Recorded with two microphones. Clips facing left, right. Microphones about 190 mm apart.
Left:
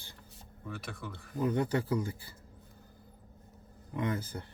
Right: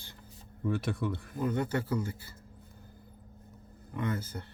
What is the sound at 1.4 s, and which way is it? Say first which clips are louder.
Speech: left 1 dB; 15° left (ahead or behind).